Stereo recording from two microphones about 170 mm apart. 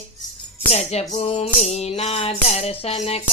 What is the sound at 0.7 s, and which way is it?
Music, 40° left (ahead or behind).